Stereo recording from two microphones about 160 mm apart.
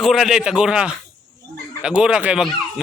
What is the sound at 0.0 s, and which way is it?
Speech, centre (ahead or behind).